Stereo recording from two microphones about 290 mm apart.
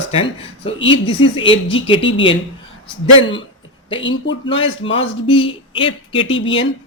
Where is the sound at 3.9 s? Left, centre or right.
Centre.